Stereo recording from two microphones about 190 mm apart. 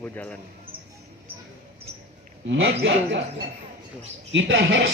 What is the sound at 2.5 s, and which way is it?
Speech, 75° right (ahead or behind).